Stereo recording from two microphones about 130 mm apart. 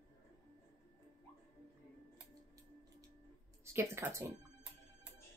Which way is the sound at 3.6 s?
20° right (ahead or behind).